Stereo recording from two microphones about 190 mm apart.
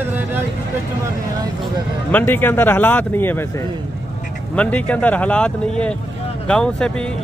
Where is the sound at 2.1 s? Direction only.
10° left (ahead or behind).